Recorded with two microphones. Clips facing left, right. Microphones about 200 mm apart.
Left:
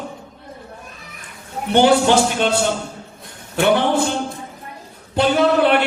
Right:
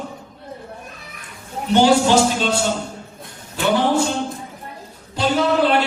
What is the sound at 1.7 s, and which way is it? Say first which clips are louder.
Speech: left 1 dB; 60° left (ahead or behind).